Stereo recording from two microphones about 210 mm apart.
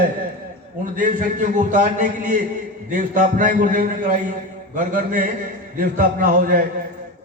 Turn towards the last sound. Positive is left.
turn(degrees=-40)  # may be behind; listen again after turning